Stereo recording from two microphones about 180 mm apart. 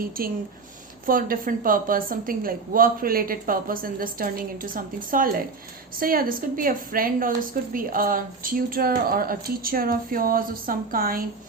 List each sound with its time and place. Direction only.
0.2 s a woman's voice: 55° right (ahead or behind)